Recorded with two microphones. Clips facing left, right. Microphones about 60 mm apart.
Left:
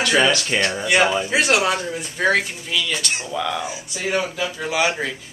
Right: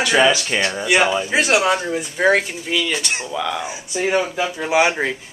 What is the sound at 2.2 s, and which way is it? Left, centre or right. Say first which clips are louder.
Speech: right 2 dB; right.